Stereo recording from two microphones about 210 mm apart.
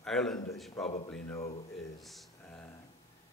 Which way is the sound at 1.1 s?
10° left (ahead or behind).